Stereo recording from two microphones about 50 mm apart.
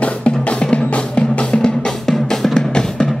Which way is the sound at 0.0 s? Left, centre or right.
Left.